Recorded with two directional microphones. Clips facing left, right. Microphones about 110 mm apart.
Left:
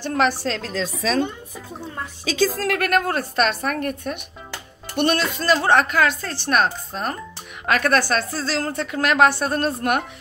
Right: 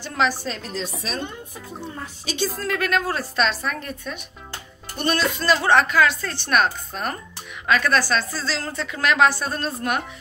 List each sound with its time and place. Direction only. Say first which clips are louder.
0.0 s a woman's voice: left 3 dB; 55° left (ahead or behind); by 0.7 s 85° left
2.5 s a woman's voice: left 3 dB; 75° left (ahead or behind); by 7.2 s 35° left (ahead or behind)
7.6 s a woman's voice: left 1 dB; 55° left (ahead or behind)